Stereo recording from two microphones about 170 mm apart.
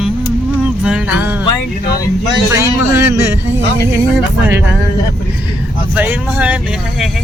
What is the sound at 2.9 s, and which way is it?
Speech, 15° right (ahead or behind).